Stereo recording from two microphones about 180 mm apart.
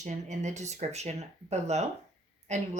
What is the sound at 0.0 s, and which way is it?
A woman's voice, 40° right (ahead or behind).